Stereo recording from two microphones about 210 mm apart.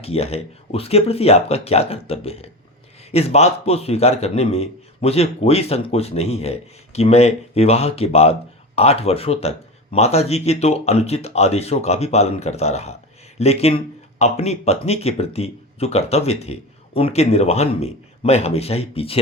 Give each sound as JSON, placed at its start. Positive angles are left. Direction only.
{"t": 0.0, "sound": "a man's voice", "side_deg": 30}